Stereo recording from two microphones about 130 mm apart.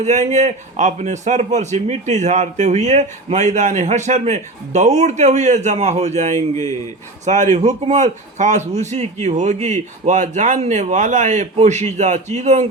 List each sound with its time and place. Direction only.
0.0 s a man's voice: 60° right (ahead or behind)